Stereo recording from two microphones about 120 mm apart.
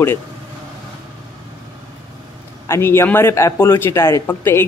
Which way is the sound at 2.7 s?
20° left (ahead or behind).